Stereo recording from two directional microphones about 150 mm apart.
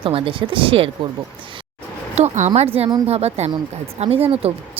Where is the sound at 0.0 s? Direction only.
35° right (ahead or behind).